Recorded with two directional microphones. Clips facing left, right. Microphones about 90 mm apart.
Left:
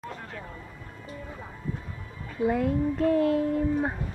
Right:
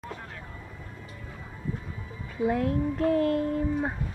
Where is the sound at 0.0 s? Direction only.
Centre (ahead or behind).